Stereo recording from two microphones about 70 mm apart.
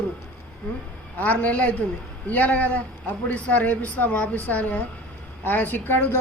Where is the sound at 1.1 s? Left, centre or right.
Left.